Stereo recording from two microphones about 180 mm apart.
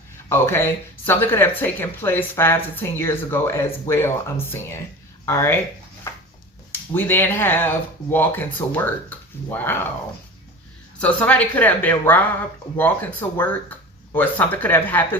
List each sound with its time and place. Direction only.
0.3 s speech: 15° left (ahead or behind)
6.7 s speech: 10° left (ahead or behind)
10.9 s speech: 10° left (ahead or behind)